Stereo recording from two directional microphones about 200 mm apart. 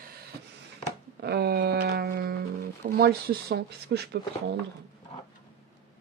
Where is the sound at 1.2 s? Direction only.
55° right (ahead or behind).